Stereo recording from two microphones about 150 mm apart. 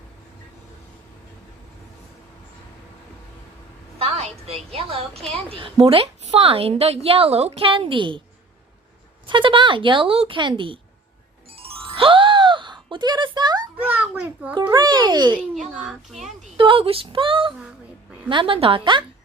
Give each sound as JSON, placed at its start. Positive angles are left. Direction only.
{"t": 3.9, "sound": "a woman's voice", "side_deg": -45}
{"t": 9.2, "sound": "a woman's voice", "side_deg": -35}
{"t": 11.5, "sound": "music", "side_deg": -40}
{"t": 13.8, "sound": "a child's voice", "side_deg": -10}
{"t": 14.7, "sound": "a child's voice", "side_deg": -25}
{"t": 15.7, "sound": "a child's voice", "side_deg": -5}
{"t": 16.6, "sound": "a woman's voice", "side_deg": -35}